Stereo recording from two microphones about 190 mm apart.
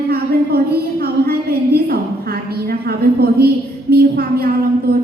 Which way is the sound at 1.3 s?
55° right (ahead or behind).